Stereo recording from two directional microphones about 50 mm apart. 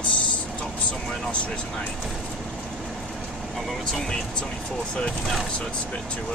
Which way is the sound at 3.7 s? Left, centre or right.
Centre.